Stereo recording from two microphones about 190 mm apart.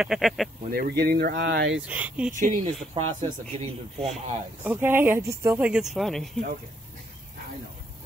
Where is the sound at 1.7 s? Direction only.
5° right (ahead or behind).